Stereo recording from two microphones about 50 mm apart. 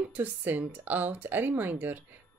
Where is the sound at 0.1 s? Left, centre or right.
Right.